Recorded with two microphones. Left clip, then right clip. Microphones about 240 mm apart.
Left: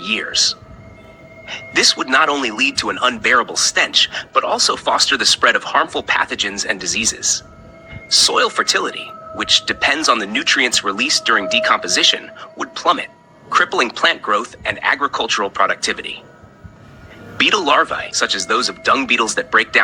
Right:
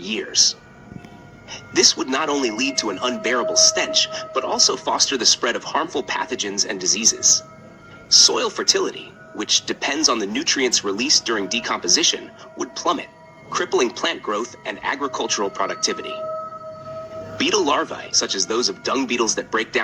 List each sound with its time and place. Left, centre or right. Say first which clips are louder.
0.0 s a man's voice: left 3 dB; left
17.3 s a man's voice: left 6 dB; left